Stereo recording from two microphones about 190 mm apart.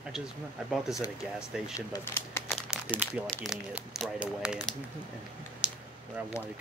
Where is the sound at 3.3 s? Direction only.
Centre (ahead or behind).